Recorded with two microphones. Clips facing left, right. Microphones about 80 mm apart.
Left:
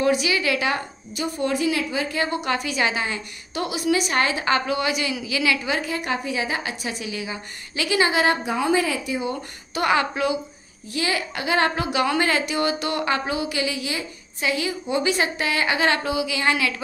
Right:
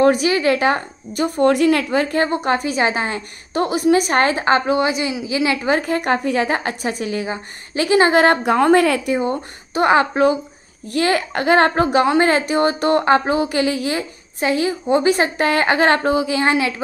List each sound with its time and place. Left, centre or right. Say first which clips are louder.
0.0 s a woman's voice: right 7 dB; right
2.2 s a woman's voice: right 6 dB; right
9.2 s a woman's voice: right 6 dB; right
10.9 s a woman's voice: right 7 dB; right